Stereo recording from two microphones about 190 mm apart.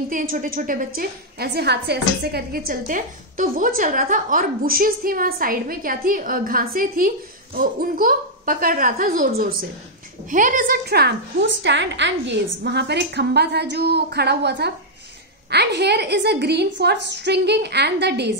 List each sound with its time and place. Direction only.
0.1 s a woman's voice: 45° right (ahead or behind)